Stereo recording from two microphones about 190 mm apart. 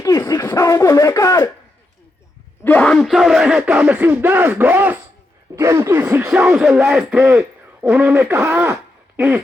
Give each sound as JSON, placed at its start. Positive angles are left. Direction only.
{"t": 0.0, "sound": "speech", "side_deg": 15}
{"t": 2.6, "sound": "speech", "side_deg": 5}
{"t": 8.7, "sound": "a sound", "side_deg": -10}